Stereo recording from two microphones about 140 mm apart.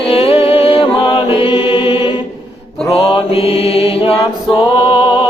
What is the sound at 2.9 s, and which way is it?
Mantra, 45° left (ahead or behind).